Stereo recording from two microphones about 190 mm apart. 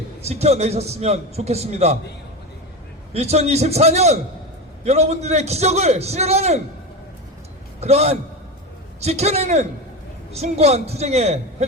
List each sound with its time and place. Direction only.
0.3 s a man's voice: 35° right (ahead or behind)
3.1 s a man's voice: 35° right (ahead or behind)
7.8 s a man's voice: 35° right (ahead or behind)